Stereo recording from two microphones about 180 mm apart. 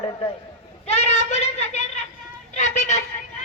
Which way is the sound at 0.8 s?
35° left (ahead or behind).